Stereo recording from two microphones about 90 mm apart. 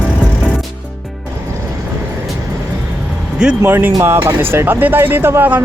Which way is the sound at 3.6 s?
25° right (ahead or behind).